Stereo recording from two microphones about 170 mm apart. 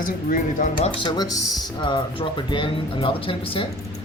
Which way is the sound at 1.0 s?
25° left (ahead or behind).